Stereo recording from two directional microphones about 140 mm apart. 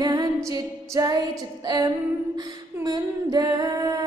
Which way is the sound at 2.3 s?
30° right (ahead or behind).